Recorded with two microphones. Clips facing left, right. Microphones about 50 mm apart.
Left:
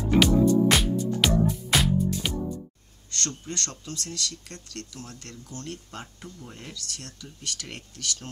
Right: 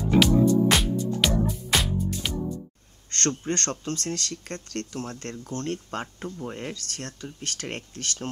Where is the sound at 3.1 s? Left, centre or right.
Right.